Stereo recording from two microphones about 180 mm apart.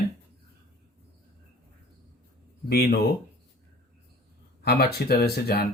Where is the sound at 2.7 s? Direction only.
60° left (ahead or behind).